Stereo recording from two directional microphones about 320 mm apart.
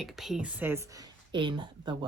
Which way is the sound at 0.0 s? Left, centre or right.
Centre.